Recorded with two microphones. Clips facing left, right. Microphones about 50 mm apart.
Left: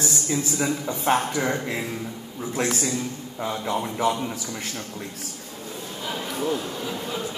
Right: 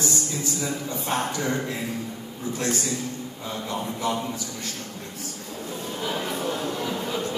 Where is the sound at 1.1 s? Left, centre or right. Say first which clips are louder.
Left 6 dB; left.